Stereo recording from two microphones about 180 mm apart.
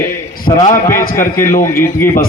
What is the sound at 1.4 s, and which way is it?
Speech, 50° left (ahead or behind).